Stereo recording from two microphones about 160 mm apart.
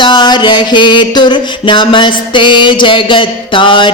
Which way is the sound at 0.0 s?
30° left (ahead or behind).